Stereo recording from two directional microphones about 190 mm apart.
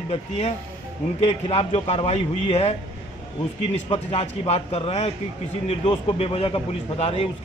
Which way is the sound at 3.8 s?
30° left (ahead or behind).